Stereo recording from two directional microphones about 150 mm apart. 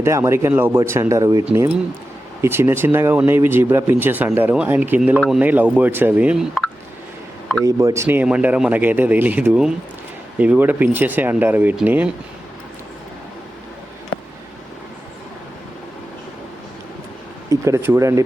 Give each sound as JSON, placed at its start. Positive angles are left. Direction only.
{"t": 0.0, "sound": "speech", "side_deg": -15}
{"t": 7.6, "sound": "speech", "side_deg": -20}
{"t": 17.5, "sound": "speech", "side_deg": -20}